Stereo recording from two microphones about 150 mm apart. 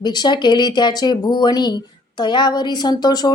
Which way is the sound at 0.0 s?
30° left (ahead or behind).